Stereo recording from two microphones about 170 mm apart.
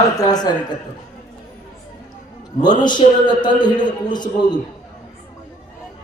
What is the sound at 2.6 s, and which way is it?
A man's voice, 25° left (ahead or behind).